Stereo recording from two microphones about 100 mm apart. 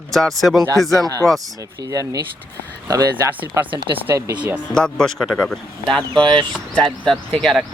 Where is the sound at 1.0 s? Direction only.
35° right (ahead or behind).